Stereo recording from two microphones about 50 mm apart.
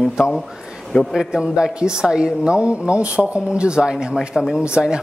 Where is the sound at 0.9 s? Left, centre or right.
Left.